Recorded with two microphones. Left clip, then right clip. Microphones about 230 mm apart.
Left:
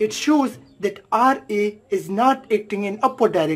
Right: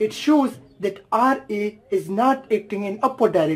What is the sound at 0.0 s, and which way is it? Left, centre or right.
Speech, centre.